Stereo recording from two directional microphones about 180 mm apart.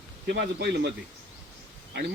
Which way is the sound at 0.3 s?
70° right (ahead or behind).